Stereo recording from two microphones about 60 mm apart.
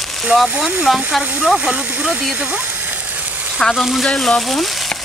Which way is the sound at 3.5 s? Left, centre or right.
Centre.